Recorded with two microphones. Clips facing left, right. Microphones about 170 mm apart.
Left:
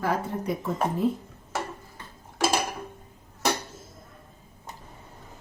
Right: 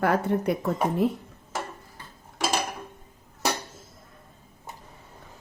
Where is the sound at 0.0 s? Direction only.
65° right (ahead or behind).